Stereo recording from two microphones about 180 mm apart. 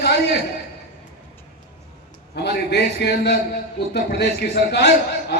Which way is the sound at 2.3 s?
65° left (ahead or behind).